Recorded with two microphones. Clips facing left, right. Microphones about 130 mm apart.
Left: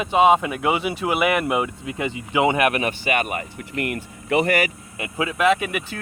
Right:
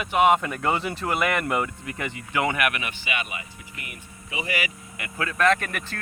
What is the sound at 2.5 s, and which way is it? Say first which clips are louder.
Speech: left 7 dB; 30° left (ahead or behind).